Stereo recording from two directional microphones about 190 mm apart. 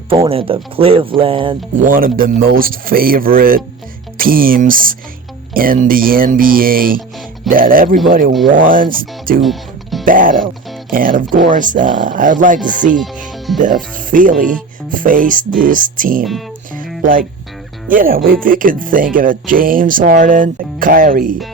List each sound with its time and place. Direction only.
0.3 s speech: 30° right (ahead or behind)
1.8 s speech: 50° right (ahead or behind)
9.4 s music: centre (ahead or behind)
10.1 s speech: 45° right (ahead or behind)
13.2 s music: centre (ahead or behind)
13.6 s speech: 45° right (ahead or behind)